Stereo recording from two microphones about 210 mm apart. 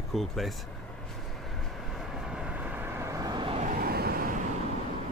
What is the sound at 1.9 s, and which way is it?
Vehicle, 5° right (ahead or behind).